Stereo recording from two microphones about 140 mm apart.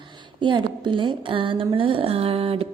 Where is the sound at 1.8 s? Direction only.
40° right (ahead or behind).